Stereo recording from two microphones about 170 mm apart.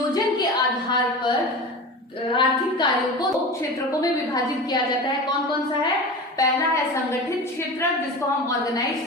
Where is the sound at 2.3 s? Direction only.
25° left (ahead or behind).